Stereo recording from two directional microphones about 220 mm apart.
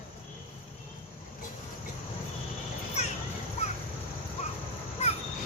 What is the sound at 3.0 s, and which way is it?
Children playing, 30° left (ahead or behind).